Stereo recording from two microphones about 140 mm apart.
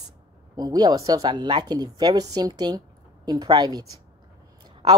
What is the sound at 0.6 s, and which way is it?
A woman's voice, 30° right (ahead or behind).